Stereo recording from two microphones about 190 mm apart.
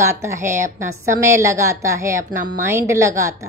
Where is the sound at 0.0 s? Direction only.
15° right (ahead or behind).